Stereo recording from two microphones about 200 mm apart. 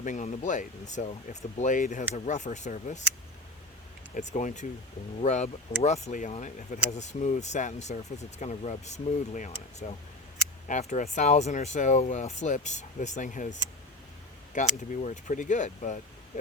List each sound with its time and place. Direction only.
0.0 s speech: 40° left (ahead or behind)
4.1 s speech: 35° left (ahead or behind)
14.8 s speech: 40° left (ahead or behind)